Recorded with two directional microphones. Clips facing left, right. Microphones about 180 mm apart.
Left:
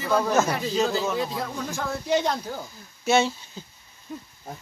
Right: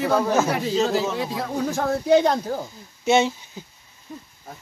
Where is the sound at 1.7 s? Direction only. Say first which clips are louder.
Right 7 dB; 55° right (ahead or behind).